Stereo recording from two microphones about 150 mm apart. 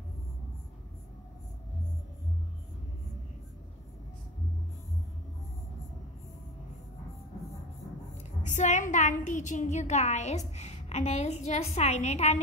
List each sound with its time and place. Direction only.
8.2 s a woman's voice: 55° left (ahead or behind)